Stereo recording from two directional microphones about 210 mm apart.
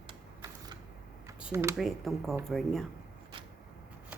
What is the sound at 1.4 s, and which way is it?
Speech, 10° right (ahead or behind).